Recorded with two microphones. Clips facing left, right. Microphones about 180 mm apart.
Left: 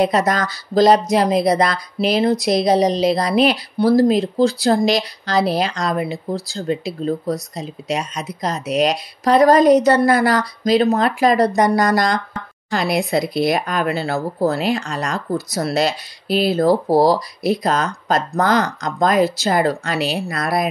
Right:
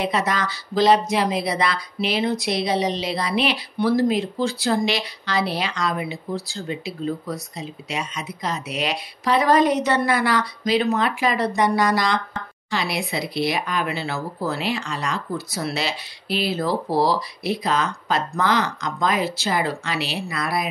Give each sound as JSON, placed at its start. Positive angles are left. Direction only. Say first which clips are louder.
{"t": 0.0, "sound": "speech", "louder": "left 6 dB", "side_deg": 45}